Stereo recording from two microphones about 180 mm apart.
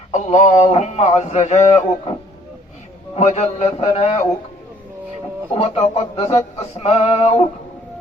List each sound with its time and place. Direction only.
0.1 s a man's voice: 40° left (ahead or behind)
3.2 s a man's voice: 40° left (ahead or behind)
5.5 s a man's voice: 35° left (ahead or behind)